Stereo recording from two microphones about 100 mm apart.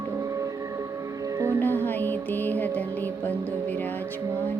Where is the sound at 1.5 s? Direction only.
20° left (ahead or behind).